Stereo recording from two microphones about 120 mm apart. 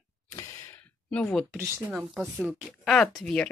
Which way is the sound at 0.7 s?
20° left (ahead or behind).